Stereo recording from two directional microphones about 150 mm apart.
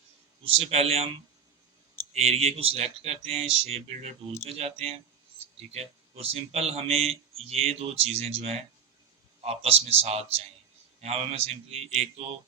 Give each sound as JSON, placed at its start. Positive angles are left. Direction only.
{"t": 0.4, "sound": "speech", "side_deg": -40}
{"t": 2.1, "sound": "speech", "side_deg": -45}